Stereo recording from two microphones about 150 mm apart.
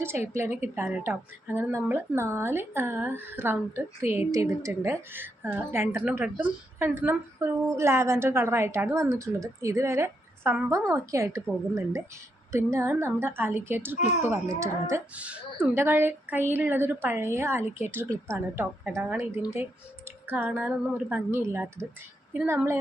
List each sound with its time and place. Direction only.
0.3 s a woman's voice: 15° right (ahead or behind)
12.5 s a woman's voice: 20° right (ahead or behind)
15.1 s a woman's voice: 10° right (ahead or behind)